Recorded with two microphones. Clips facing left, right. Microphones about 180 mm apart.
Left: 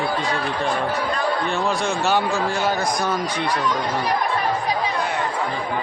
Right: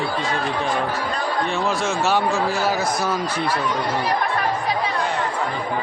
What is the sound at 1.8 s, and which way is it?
Speech, centre (ahead or behind).